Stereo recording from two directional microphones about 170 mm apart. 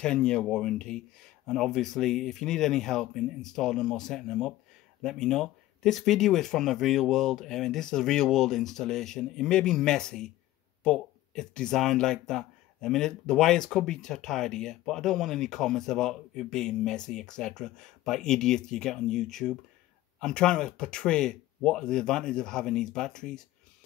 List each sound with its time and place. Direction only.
0.0 s speech: 5° left (ahead or behind)